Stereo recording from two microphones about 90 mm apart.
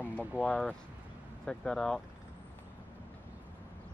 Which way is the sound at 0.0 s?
20° left (ahead or behind).